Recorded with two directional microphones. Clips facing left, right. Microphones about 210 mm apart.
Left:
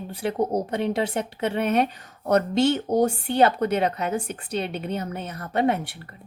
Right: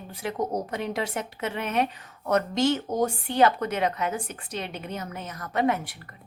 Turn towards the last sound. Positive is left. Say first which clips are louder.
# left 2 dB
turn(degrees=30)  # may be behind; listen again after turning